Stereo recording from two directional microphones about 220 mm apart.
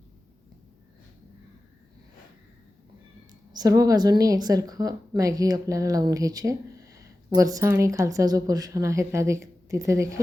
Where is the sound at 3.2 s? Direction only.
20° right (ahead or behind).